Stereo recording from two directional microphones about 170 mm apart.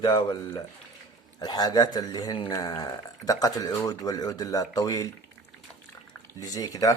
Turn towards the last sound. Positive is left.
turn(degrees=20)  # may be behind; listen again after turning